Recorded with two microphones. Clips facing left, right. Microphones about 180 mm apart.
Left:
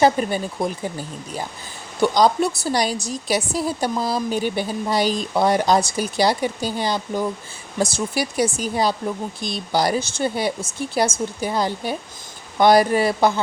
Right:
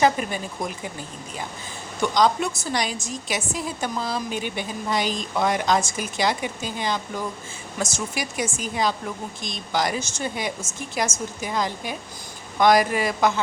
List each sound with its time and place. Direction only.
0.0 s a woman's voice: 35° left (ahead or behind)
2.0 s a woman's voice: 35° left (ahead or behind)